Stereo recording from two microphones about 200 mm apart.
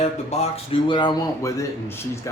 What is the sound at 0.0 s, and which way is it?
Speech, 35° left (ahead or behind).